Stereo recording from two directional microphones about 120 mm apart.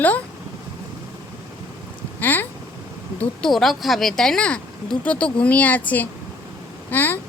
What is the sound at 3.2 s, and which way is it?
Speech, 5° left (ahead or behind).